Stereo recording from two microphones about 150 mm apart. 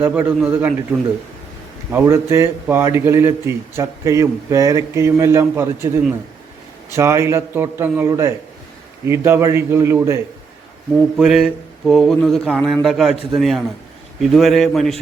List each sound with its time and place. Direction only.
0.0 s speech: 15° right (ahead or behind)
1.9 s a man's voice: 15° right (ahead or behind)
11.2 s mantra: 5° right (ahead or behind)